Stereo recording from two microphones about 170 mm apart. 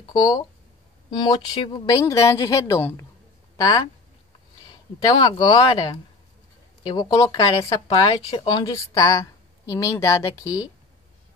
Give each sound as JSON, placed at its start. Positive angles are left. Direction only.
{"t": 0.0, "sound": "speech", "side_deg": 25}
{"t": 5.0, "sound": "speech", "side_deg": 25}